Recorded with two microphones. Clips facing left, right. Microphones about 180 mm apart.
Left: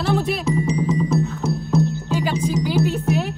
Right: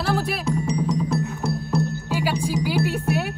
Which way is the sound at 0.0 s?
Centre (ahead or behind).